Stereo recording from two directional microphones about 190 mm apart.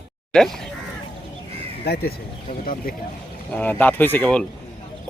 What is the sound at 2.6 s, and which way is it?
Speech, 50° left (ahead or behind).